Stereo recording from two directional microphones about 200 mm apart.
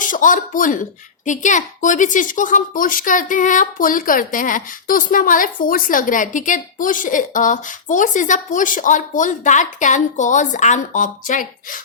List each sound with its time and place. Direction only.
0.0 s a woman's voice: 40° left (ahead or behind)